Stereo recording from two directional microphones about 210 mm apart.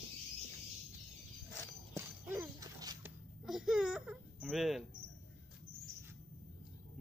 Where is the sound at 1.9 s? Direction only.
15° right (ahead or behind).